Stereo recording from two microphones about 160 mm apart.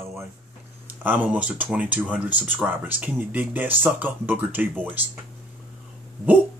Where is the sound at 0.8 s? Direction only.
10° right (ahead or behind).